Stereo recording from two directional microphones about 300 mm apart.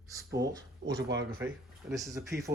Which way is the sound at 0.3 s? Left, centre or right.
Centre.